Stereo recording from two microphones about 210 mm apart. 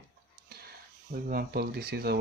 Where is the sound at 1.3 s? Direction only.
45° right (ahead or behind).